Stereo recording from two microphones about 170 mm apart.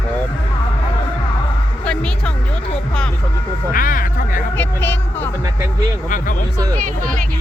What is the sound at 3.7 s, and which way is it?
Speech, 55° left (ahead or behind).